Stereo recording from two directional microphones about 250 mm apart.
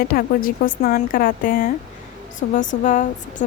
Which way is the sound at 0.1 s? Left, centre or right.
Left.